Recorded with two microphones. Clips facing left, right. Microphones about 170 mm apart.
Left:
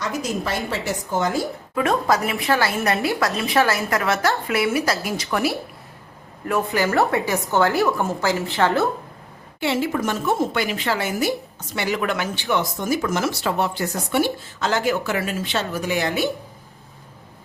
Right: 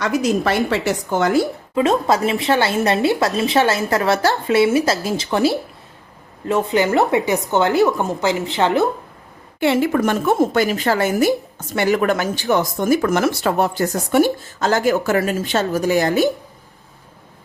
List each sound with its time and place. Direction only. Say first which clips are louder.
0.0 s a woman's voice: right 7 dB; 75° right (ahead or behind)
1.7 s speech: right 3 dB; 25° right (ahead or behind)
9.6 s a woman's voice: right 6 dB; 55° right (ahead or behind)